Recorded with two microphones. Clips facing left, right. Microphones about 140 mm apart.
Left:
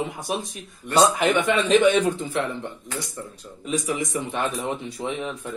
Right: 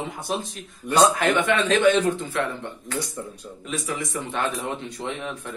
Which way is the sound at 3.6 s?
20° left (ahead or behind).